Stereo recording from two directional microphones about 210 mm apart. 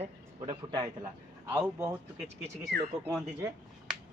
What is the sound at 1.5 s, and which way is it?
Speech, 10° right (ahead or behind).